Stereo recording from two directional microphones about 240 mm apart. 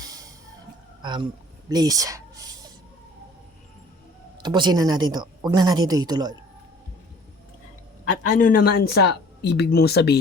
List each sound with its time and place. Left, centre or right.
0.0 s music: centre
1.0 s speech: centre
4.4 s speech: centre
8.3 s speech: left